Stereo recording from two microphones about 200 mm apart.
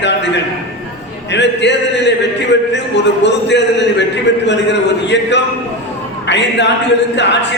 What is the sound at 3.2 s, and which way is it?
A man's voice, 60° left (ahead or behind).